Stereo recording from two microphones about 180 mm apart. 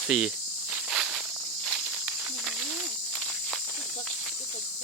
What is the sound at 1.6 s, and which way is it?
Snake, centre (ahead or behind).